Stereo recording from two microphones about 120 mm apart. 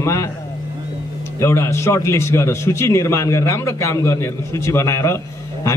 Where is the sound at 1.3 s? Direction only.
25° left (ahead or behind).